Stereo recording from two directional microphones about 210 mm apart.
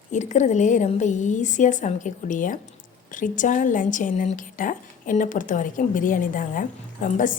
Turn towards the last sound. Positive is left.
turn(degrees=40)  # may be behind; listen again after turning